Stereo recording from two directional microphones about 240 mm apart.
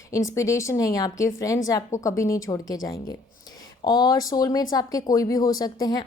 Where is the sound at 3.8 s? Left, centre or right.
Centre.